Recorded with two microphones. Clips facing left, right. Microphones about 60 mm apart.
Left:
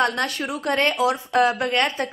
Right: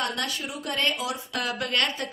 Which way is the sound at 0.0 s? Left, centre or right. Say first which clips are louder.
Left 7 dB; left.